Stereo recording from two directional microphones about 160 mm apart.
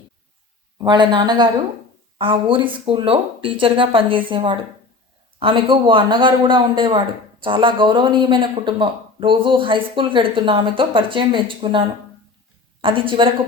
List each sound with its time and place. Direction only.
0.8 s speech: 25° right (ahead or behind)